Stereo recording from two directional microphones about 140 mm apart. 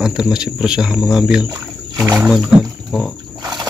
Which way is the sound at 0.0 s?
5° right (ahead or behind).